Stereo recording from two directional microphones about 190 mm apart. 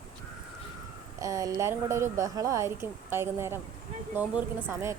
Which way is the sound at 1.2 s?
15° right (ahead or behind).